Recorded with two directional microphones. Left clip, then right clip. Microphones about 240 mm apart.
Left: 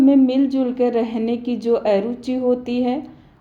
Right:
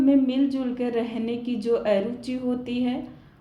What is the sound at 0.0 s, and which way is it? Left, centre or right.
A woman's voice, left.